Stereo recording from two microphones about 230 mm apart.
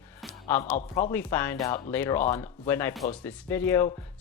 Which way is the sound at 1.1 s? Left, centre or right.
Centre.